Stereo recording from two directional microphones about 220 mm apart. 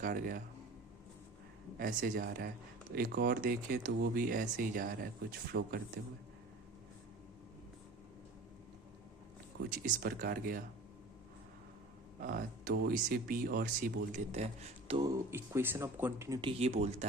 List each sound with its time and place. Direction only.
0.0 s speech: 40° right (ahead or behind)
1.8 s speech: 40° right (ahead or behind)
9.6 s speech: 40° right (ahead or behind)
12.2 s speech: 40° right (ahead or behind)